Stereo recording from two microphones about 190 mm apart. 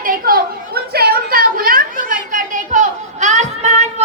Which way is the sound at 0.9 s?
55° right (ahead or behind).